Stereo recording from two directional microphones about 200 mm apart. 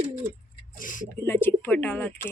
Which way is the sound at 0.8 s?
40° left (ahead or behind).